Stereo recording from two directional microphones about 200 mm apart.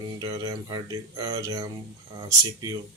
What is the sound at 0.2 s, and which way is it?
Speech, 15° right (ahead or behind).